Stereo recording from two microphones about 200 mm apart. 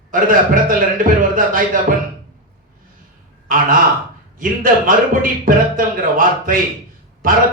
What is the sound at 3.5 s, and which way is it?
A man's voice, 45° right (ahead or behind).